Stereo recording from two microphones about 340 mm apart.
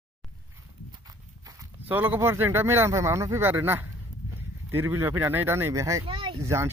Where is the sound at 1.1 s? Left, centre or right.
Centre.